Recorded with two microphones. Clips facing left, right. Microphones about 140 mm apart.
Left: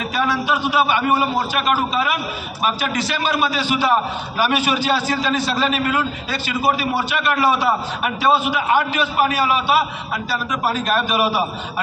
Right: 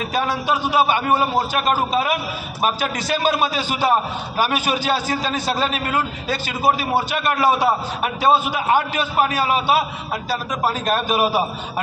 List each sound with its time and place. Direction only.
0.1 s a man's voice: 45° right (ahead or behind)